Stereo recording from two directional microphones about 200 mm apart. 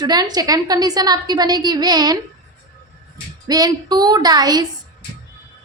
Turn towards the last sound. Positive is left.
turn(degrees=-20)  # may be behind; listen again after turning